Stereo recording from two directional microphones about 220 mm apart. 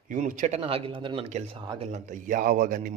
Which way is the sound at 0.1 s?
35° right (ahead or behind).